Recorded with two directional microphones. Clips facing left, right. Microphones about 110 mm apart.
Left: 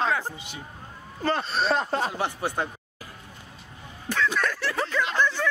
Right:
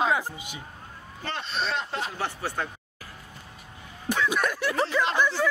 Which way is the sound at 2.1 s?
20° left (ahead or behind).